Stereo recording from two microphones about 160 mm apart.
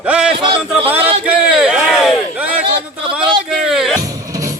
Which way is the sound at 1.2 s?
10° right (ahead or behind).